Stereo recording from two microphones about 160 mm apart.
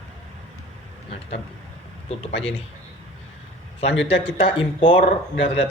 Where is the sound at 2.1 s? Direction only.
40° left (ahead or behind).